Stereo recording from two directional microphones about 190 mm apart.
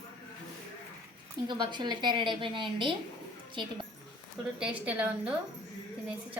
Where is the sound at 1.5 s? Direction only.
25° right (ahead or behind).